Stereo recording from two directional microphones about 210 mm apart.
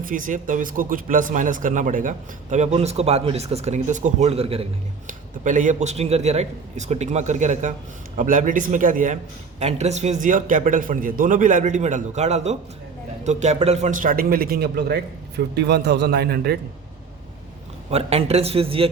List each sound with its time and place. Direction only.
0.0 s a man's voice: 40° right (ahead or behind)
17.9 s speech: 30° right (ahead or behind)